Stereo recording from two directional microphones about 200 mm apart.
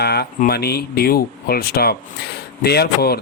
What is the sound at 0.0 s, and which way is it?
Speech, 55° left (ahead or behind).